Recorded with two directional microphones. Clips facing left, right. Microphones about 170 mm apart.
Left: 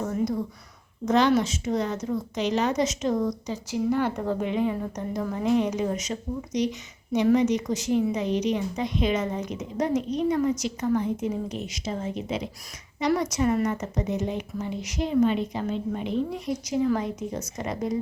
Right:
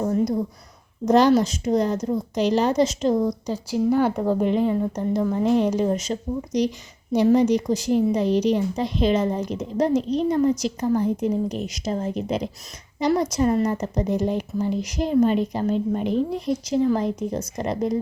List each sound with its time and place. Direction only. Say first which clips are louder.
0.0 s a woman's voice: right 5 dB; 30° right (ahead or behind)
4.3 s a woman's voice: right 6 dB; centre (ahead or behind)
4.7 s a woman's voice: right 7 dB; 30° right (ahead or behind)